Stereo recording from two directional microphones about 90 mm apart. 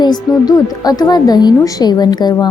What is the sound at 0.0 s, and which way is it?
A woman's voice, 50° left (ahead or behind).